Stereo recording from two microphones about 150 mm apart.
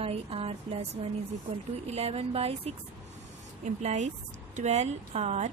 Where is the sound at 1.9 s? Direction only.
45° right (ahead or behind).